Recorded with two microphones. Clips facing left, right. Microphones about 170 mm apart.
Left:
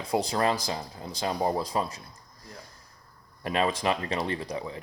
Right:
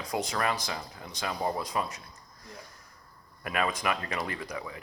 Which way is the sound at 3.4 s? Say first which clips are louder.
Left 4 dB; 30° left (ahead or behind).